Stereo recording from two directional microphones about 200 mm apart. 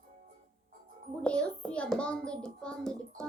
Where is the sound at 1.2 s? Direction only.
5° left (ahead or behind).